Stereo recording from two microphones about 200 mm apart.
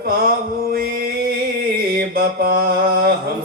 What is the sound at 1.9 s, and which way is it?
Mantra, 50° right (ahead or behind).